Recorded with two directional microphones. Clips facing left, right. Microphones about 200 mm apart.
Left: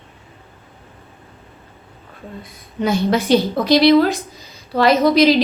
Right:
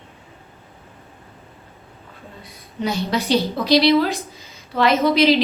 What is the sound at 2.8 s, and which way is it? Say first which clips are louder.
A woman's voice: left 5 dB; 50° left (ahead or behind).